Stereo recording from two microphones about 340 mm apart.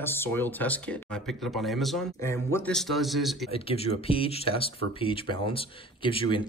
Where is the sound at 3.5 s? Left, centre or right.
Centre.